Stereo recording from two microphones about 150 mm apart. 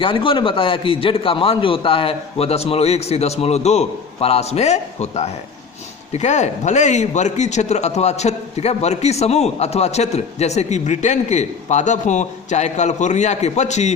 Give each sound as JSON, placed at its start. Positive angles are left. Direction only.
{"t": 0.0, "sound": "a man's voice", "side_deg": 35}